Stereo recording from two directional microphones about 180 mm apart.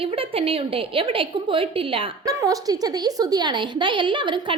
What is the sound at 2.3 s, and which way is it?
A woman's voice, 20° right (ahead or behind).